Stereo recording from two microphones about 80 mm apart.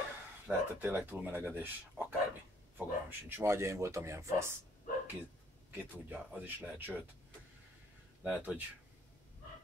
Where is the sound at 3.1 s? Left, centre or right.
Right.